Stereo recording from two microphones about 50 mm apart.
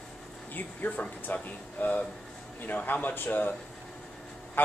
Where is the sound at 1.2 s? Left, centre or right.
Left.